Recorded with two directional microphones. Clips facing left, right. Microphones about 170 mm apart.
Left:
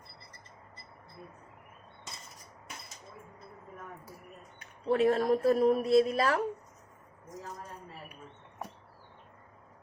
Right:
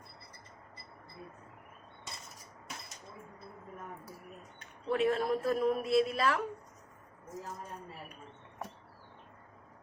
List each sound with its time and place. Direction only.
4.9 s a woman's voice: 40° left (ahead or behind)